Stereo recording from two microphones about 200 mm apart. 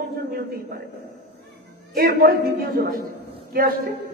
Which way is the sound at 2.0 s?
50° right (ahead or behind).